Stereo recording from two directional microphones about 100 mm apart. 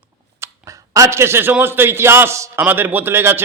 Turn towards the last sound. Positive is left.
turn(degrees=-25)  # may be behind; listen again after turning